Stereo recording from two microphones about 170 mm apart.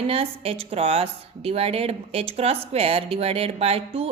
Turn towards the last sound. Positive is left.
turn(degrees=-35)  # may be behind; listen again after turning